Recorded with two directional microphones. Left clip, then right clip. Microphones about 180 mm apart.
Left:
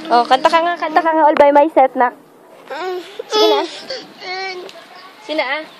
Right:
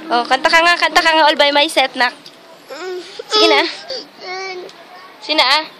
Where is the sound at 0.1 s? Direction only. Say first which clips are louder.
Left 1 dB; 20° left (ahead or behind).